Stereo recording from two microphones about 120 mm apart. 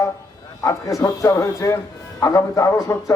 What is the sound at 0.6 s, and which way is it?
A man's voice, 30° left (ahead or behind).